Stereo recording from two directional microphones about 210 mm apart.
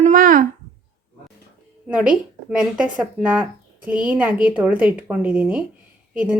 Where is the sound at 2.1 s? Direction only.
5° right (ahead or behind).